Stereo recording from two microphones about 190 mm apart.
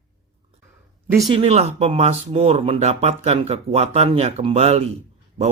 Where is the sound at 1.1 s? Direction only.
20° right (ahead or behind).